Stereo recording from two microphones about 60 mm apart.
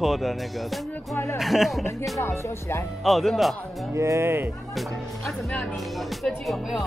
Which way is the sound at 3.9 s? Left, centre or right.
Right.